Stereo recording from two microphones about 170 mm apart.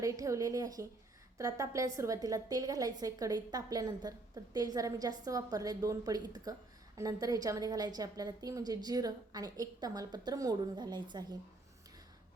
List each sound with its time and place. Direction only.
0.0 s a woman's voice: 20° right (ahead or behind)